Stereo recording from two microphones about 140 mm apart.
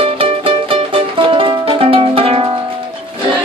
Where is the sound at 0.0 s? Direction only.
40° right (ahead or behind).